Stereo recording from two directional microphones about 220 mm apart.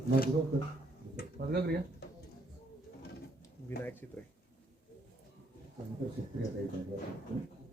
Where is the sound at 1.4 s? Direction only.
45° right (ahead or behind).